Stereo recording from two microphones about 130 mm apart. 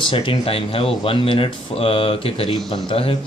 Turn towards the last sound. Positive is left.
turn(degrees=45)  # may be behind; listen again after turning